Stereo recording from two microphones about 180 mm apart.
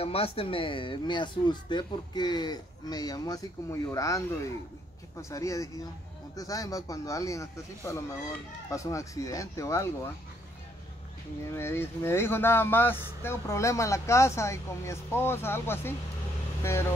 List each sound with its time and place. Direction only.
0.0 s speech: 30° left (ahead or behind); by 10.1 s 15° left (ahead or behind)
11.5 s speech: 15° left (ahead or behind)